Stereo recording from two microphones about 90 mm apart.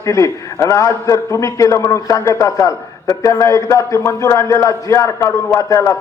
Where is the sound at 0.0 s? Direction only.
35° left (ahead or behind).